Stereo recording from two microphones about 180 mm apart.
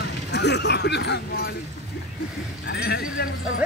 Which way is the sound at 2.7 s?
60° left (ahead or behind).